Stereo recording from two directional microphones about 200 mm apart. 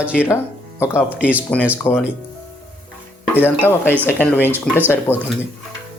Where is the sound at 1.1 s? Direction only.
5° right (ahead or behind).